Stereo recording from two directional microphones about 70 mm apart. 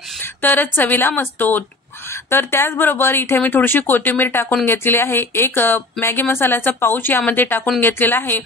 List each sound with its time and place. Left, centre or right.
0.2 s a woman's voice: left